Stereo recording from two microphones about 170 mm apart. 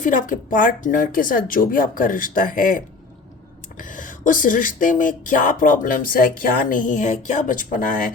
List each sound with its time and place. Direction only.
0.0 s speech: 50° left (ahead or behind)